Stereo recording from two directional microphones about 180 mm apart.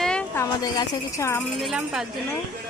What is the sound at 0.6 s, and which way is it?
Speech, 20° left (ahead or behind).